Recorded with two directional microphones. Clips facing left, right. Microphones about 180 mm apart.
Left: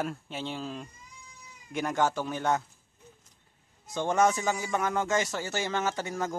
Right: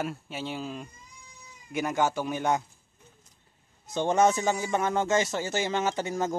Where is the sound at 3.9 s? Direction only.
20° right (ahead or behind).